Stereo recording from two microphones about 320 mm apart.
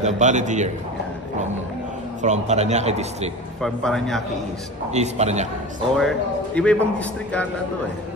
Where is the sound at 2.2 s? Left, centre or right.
Right.